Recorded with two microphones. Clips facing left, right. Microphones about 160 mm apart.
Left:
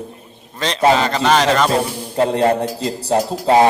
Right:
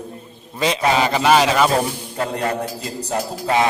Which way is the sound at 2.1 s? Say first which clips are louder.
Left 9 dB; 30° left (ahead or behind).